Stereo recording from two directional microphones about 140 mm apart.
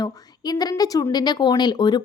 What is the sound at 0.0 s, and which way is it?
Speech, 30° left (ahead or behind).